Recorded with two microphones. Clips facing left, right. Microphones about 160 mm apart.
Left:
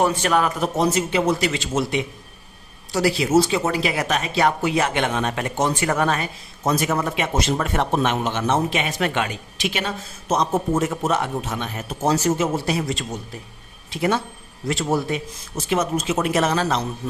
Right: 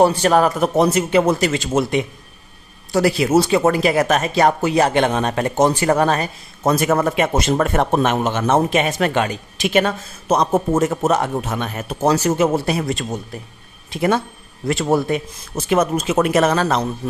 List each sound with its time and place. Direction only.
0.0 s a man's voice: 35° right (ahead or behind)
0.6 s speech: 55° right (ahead or behind); by 6.3 s 40° right (ahead or behind)
6.7 s speech: 55° right (ahead or behind)